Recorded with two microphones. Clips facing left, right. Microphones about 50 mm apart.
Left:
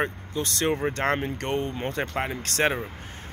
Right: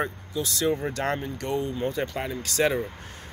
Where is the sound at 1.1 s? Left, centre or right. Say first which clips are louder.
Left 1 dB; left.